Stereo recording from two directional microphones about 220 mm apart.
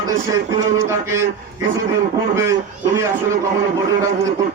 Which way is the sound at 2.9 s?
10° right (ahead or behind).